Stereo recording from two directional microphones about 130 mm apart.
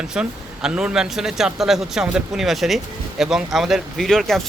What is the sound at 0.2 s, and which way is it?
A man's voice, 5° right (ahead or behind).